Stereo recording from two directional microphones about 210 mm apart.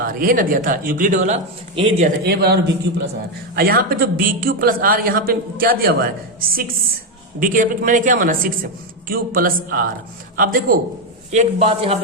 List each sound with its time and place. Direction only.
0.0 s a man's voice: 45° right (ahead or behind); by 2.0 s 25° right (ahead or behind)
2.2 s a man's voice: 50° right (ahead or behind); by 11.9 s 30° right (ahead or behind)